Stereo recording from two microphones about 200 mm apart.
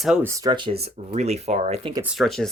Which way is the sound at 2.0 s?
Centre (ahead or behind).